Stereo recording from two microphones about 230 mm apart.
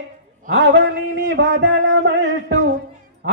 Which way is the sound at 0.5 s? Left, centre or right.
Right.